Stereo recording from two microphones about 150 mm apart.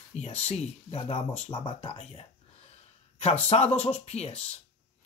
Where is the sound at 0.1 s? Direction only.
45° left (ahead or behind).